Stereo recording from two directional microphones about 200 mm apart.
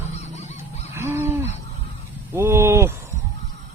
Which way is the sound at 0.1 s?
35° left (ahead or behind).